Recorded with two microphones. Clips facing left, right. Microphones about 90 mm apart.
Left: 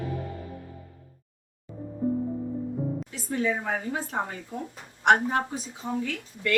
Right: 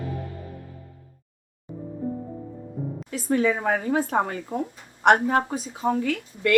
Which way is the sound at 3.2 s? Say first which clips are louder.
Right 6 dB; 70° right (ahead or behind).